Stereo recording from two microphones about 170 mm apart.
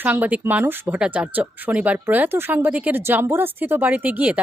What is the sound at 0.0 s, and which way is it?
Speech, 10° right (ahead or behind).